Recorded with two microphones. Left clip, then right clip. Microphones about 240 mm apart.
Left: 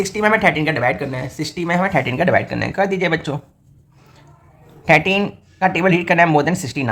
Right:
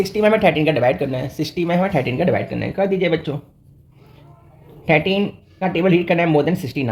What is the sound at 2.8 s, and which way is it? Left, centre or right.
Speech, left.